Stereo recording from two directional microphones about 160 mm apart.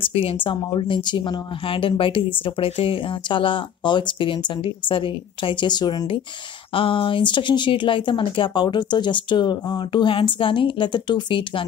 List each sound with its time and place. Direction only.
0.0 s speech: 35° left (ahead or behind)